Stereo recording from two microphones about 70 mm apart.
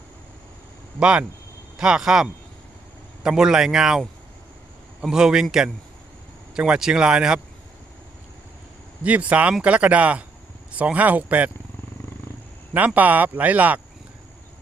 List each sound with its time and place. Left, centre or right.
0.9 s speech: centre
5.0 s speech: centre
9.0 s speech: centre
12.7 s speech: right